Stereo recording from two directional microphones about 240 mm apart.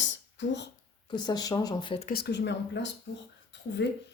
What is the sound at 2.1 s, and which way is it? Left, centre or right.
Speech, left.